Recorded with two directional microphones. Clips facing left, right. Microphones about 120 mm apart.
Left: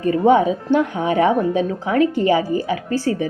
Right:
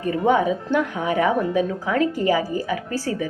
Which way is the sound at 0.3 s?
25° left (ahead or behind).